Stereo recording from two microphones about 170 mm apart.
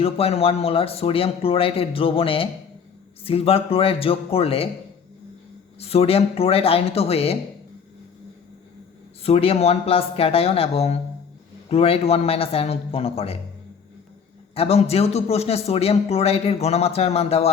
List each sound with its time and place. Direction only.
0.0 s a man's voice: 35° left (ahead or behind)
5.8 s a man's voice: 35° left (ahead or behind)
9.2 s a man's voice: 35° left (ahead or behind)
14.5 s a man's voice: 35° left (ahead or behind)